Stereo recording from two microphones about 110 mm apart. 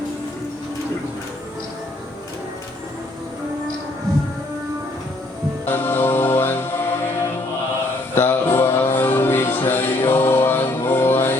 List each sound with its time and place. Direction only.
5.6 s music: 20° left (ahead or behind)
8.1 s music: 20° left (ahead or behind)